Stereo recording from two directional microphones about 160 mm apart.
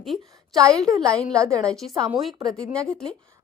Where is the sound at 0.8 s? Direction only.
20° right (ahead or behind).